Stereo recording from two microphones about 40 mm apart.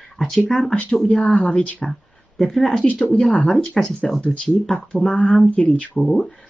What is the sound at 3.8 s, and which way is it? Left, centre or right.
Speech, centre.